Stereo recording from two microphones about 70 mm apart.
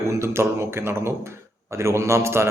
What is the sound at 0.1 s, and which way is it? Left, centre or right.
A man's voice, right.